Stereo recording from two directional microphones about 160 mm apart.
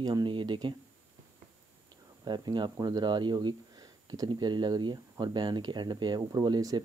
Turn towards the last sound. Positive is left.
turn(degrees=-25)  # may be behind; listen again after turning